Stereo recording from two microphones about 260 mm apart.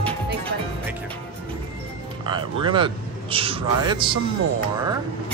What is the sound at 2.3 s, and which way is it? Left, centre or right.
Speech, centre.